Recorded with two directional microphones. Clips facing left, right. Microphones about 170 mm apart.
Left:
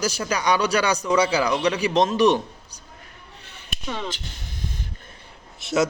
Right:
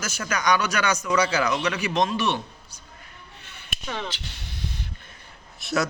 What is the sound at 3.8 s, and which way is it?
Speech, 10° left (ahead or behind).